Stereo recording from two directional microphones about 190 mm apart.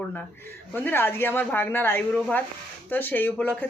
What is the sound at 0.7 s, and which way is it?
Speech, 10° left (ahead or behind).